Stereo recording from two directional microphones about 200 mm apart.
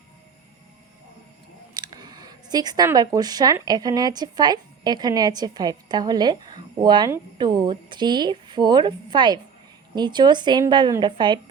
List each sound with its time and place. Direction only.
1.7 s speech: 20° right (ahead or behind)